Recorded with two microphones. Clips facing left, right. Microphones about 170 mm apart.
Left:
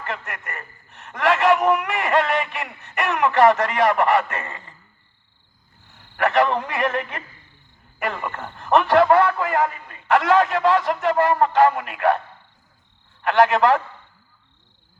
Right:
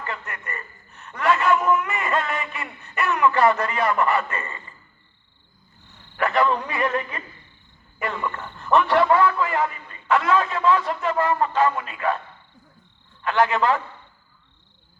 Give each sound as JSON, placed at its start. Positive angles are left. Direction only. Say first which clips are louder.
{"t": 0.1, "sound": "speech", "louder": "left 5 dB", "side_deg": 80}
{"t": 6.1, "sound": "speech", "louder": "left 2 dB", "side_deg": 80}
{"t": 13.2, "sound": "speech", "louder": "left 4 dB", "side_deg": 80}